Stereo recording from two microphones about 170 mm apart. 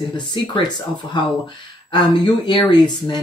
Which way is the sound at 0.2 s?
25° left (ahead or behind).